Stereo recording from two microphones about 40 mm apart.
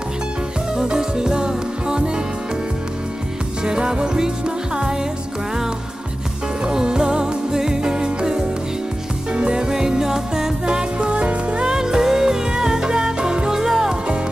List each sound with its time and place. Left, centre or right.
0.7 s music: centre
3.6 s music: right
6.6 s music: centre